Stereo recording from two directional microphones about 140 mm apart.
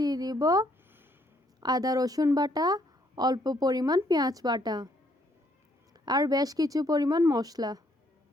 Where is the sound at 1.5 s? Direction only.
30° right (ahead or behind).